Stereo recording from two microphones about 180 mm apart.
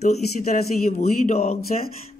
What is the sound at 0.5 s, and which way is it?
Speech, 55° left (ahead or behind).